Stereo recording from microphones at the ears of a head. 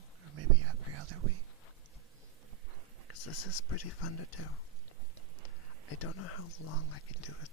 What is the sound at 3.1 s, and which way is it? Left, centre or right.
Speech, left.